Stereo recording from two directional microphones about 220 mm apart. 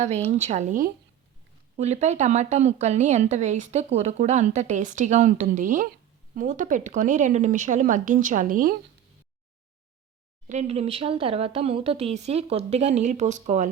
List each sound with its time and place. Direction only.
0.0 s speech: 30° right (ahead or behind)
10.5 s speech: 30° right (ahead or behind)